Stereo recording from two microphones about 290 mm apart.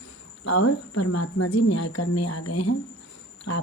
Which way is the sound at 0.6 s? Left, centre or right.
Left.